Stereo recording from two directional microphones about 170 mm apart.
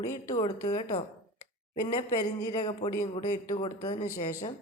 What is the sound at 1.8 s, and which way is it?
Speech, 20° left (ahead or behind).